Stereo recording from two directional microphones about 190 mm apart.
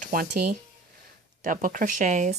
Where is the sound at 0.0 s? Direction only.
45° right (ahead or behind).